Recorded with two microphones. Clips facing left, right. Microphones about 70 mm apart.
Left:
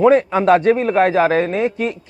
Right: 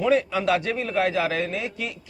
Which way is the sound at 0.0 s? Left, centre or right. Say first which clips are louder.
Left 9 dB; left.